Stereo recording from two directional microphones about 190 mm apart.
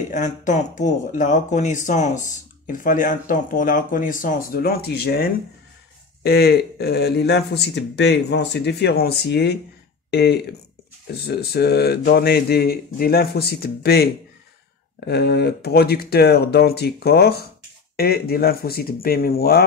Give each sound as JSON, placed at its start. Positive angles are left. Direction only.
{"t": 0.1, "sound": "speech", "side_deg": 40}
{"t": 15.0, "sound": "speech", "side_deg": 60}